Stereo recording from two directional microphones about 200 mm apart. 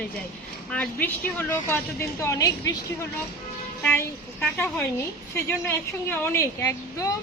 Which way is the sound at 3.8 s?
5° left (ahead or behind).